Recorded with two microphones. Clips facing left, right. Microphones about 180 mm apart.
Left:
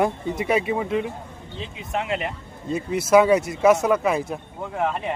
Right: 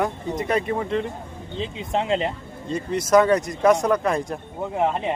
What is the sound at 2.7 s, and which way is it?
Speech, 5° left (ahead or behind).